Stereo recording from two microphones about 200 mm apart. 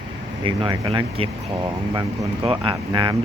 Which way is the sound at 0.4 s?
25° right (ahead or behind).